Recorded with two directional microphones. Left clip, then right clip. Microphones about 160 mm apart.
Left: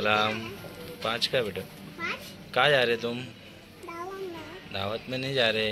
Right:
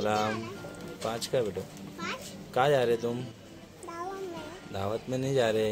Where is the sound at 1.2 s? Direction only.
30° right (ahead or behind).